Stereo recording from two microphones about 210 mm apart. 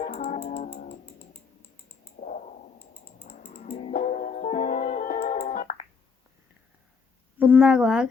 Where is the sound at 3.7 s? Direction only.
35° left (ahead or behind).